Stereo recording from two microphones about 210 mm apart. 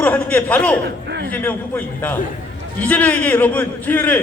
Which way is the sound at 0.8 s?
55° right (ahead or behind).